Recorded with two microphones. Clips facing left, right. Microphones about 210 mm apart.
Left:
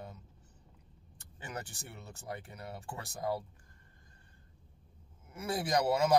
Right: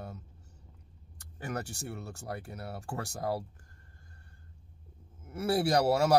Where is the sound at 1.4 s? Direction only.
70° right (ahead or behind).